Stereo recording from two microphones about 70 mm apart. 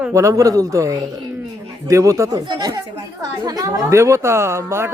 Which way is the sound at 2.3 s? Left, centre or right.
Right.